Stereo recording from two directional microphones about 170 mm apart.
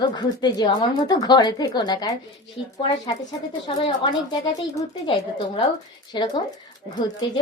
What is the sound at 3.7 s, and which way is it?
A woman's voice, 25° left (ahead or behind).